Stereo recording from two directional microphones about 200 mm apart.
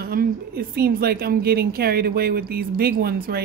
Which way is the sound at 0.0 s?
50° right (ahead or behind).